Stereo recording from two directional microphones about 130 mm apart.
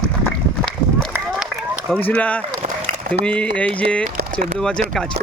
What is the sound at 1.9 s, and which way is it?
Speech, 10° left (ahead or behind).